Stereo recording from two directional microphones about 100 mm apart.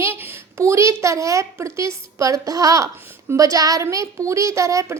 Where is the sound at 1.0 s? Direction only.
30° right (ahead or behind).